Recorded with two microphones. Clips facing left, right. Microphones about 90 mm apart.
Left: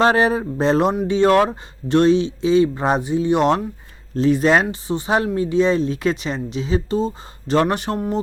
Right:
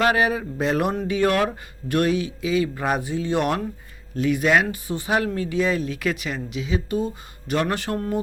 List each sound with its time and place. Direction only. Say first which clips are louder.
0.0 s speech: left 4 dB; 30° left (ahead or behind)